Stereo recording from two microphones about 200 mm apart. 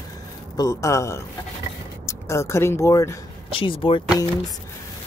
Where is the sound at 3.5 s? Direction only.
25° left (ahead or behind).